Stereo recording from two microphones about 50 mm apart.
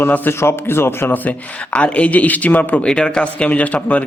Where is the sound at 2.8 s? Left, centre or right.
Centre.